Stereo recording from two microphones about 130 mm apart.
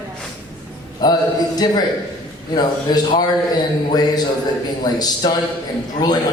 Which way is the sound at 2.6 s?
30° left (ahead or behind).